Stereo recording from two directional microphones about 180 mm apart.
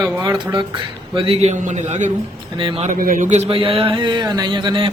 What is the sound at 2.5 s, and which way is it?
Speech, 30° right (ahead or behind).